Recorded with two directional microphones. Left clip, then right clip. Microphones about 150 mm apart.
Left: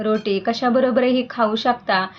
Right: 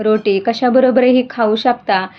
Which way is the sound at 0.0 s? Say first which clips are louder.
Right 6 dB; 45° right (ahead or behind).